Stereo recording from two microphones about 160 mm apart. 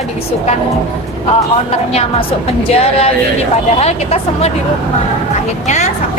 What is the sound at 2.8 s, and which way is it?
Speech, 40° left (ahead or behind).